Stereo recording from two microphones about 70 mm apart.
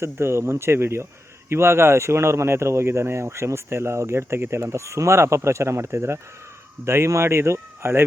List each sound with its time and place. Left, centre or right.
0.0 s speech: right